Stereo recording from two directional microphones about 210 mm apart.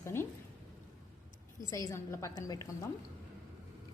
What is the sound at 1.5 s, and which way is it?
Speech, 15° left (ahead or behind).